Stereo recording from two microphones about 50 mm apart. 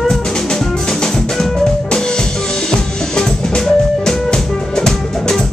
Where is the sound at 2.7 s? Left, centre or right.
Centre.